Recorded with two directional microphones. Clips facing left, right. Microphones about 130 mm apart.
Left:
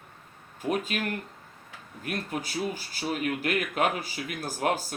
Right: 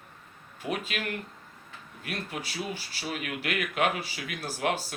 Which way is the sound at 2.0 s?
40° left (ahead or behind).